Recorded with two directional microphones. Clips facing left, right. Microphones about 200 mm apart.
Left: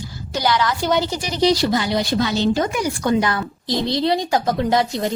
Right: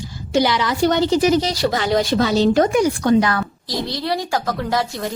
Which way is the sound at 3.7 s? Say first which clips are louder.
Left 6 dB; 25° left (ahead or behind).